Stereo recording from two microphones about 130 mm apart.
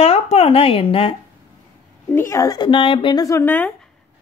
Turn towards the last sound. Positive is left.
turn(degrees=15)  # may be behind; listen again after turning